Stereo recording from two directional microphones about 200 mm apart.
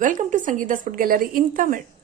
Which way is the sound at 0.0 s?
40° right (ahead or behind).